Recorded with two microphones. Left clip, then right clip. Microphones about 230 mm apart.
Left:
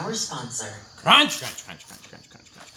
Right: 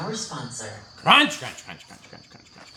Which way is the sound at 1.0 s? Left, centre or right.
Centre.